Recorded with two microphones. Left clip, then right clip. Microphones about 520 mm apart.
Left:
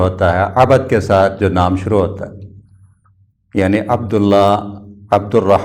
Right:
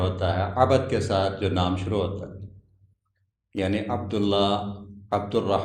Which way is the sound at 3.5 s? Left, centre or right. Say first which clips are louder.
Left 12 dB; left.